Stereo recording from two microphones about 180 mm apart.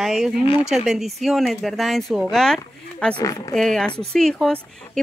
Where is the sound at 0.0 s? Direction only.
Centre (ahead or behind).